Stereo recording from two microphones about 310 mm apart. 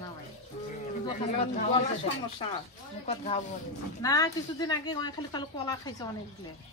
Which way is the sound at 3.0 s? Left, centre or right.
Centre.